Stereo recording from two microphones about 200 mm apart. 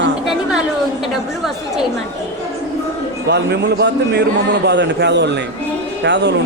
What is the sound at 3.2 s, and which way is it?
A man's voice, 55° right (ahead or behind).